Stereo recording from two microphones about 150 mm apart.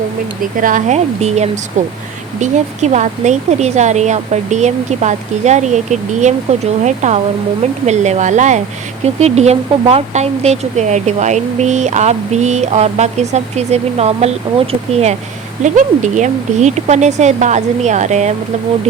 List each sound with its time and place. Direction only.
0.5 s speech: 60° right (ahead or behind); by 15.1 s 40° right (ahead or behind)
15.6 s speech: 55° right (ahead or behind)